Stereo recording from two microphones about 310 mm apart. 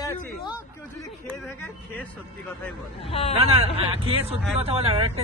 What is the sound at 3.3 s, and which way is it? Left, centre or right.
Speech, centre.